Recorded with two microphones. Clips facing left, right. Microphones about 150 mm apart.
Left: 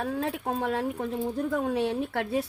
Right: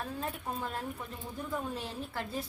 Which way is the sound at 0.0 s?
75° left (ahead or behind).